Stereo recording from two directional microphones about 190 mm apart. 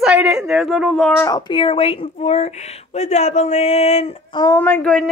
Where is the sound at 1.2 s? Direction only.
25° left (ahead or behind).